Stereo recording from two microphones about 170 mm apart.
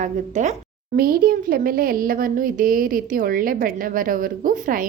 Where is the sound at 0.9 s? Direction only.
60° right (ahead or behind).